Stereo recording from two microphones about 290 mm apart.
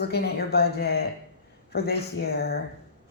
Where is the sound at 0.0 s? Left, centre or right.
Left.